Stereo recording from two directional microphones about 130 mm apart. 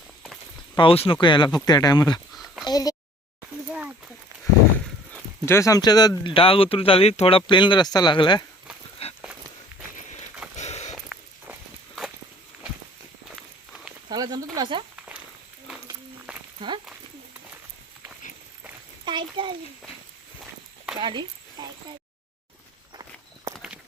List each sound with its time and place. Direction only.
0.8 s speech: 45° left (ahead or behind)
2.3 s a sound: centre (ahead or behind)
2.6 s speech: 30° left (ahead or behind)
3.7 s a sound: 10° right (ahead or behind)
5.5 s speech: 25° left (ahead or behind)
9.0 s a sound: 50° left (ahead or behind)
10.6 s a sound: 60° left (ahead or behind)
14.1 s speech: 30° right (ahead or behind)
14.9 s walk: 10° right (ahead or behind)
16.6 s speech: 40° right (ahead or behind)
19.0 s a child's voice: 40° right (ahead or behind)
21.0 s speech: 35° right (ahead or behind)